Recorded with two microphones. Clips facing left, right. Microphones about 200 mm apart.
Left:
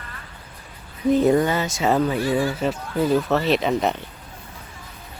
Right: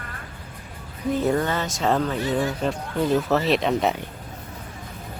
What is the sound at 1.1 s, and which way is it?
Speech, 15° left (ahead or behind).